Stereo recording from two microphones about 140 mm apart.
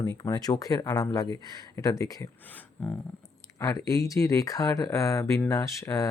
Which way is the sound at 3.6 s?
25° left (ahead or behind).